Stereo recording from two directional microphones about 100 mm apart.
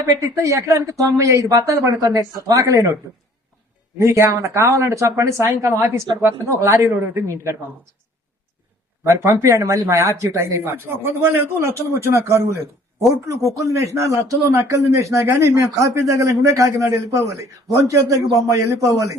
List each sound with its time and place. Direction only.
0.0 s speech: 35° right (ahead or behind)
9.0 s speech: 30° right (ahead or behind)